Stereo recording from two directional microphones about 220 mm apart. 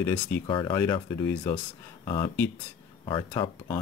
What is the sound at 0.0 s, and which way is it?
Speech, 10° left (ahead or behind).